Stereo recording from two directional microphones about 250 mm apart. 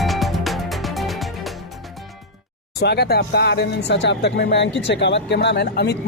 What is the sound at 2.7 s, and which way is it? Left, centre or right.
Speech, left.